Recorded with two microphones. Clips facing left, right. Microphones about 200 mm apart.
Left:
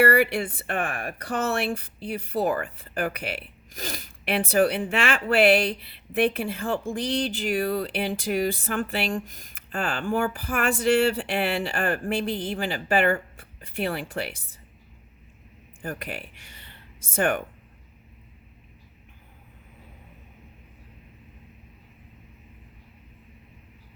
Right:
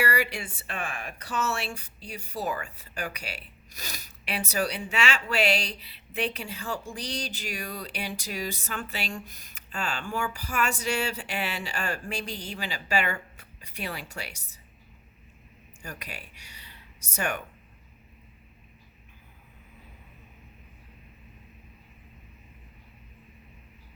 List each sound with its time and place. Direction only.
0.0 s speech: 55° left (ahead or behind)
15.8 s speech: 55° left (ahead or behind)